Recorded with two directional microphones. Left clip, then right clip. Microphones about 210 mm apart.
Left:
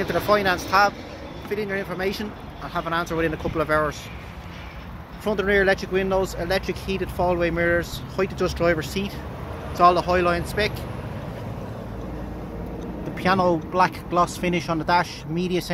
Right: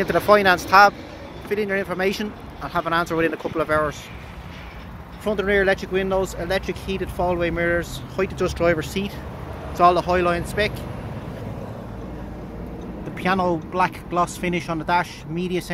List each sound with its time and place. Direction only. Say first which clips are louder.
0.0 s speech: right 4 dB; 35° right (ahead or behind)
3.5 s speech: even; 10° right (ahead or behind)
5.2 s speech: even; 5° right (ahead or behind)
13.1 s speech: left 1 dB; 5° left (ahead or behind)